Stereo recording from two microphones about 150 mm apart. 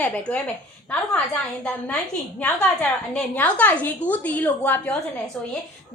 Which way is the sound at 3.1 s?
10° left (ahead or behind).